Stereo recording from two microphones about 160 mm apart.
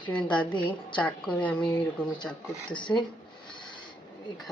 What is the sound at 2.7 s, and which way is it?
Speech, 30° left (ahead or behind).